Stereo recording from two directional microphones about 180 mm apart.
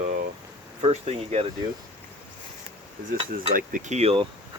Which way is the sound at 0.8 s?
35° right (ahead or behind).